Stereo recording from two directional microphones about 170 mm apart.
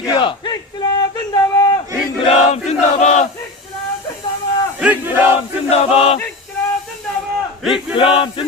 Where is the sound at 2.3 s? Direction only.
40° left (ahead or behind).